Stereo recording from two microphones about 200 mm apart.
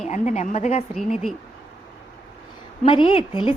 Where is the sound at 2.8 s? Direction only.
25° left (ahead or behind).